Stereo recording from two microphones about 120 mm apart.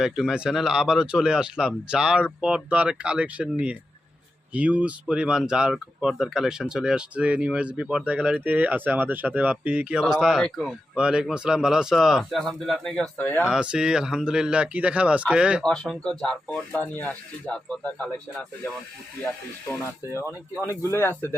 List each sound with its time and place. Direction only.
0.0 s speech: 5° right (ahead or behind); by 13.5 s 15° left (ahead or behind)
13.5 s speech: 5° right (ahead or behind)
15.6 s speech: 5° left (ahead or behind); by 20.7 s 25° left (ahead or behind)